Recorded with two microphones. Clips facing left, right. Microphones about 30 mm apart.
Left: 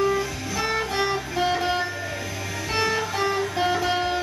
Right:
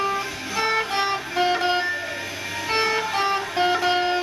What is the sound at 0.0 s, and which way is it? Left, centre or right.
Music, right.